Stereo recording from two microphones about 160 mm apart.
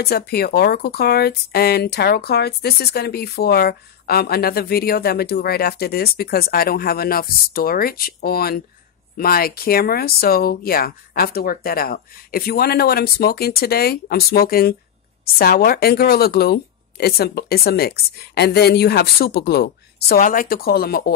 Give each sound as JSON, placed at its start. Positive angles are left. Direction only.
{"t": 0.0, "sound": "speech", "side_deg": 75}